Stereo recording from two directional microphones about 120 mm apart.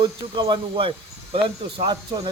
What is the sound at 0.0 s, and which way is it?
A man's voice, 40° right (ahead or behind).